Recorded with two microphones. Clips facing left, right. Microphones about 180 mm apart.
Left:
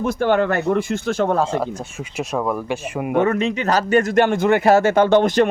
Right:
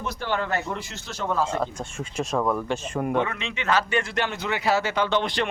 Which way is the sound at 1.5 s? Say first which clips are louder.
Left 4 dB; 10° left (ahead or behind).